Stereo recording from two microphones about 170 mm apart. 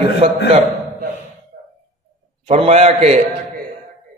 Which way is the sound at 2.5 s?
40° right (ahead or behind).